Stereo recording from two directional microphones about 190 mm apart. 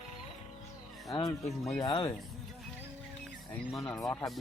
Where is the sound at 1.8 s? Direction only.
25° left (ahead or behind).